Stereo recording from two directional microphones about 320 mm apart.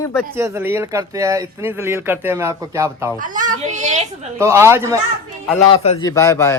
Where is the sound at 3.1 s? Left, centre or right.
Right.